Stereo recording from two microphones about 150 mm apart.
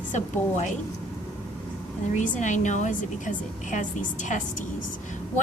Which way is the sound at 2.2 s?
55° left (ahead or behind).